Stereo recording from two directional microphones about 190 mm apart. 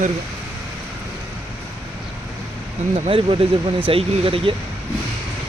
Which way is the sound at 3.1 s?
30° right (ahead or behind).